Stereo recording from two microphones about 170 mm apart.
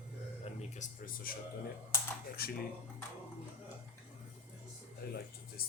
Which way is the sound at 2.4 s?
65° left (ahead or behind).